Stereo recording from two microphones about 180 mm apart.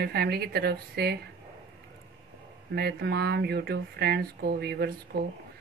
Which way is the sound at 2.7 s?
65° right (ahead or behind).